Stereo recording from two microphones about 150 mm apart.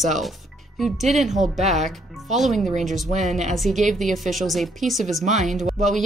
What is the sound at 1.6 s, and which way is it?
Speech, 50° right (ahead or behind).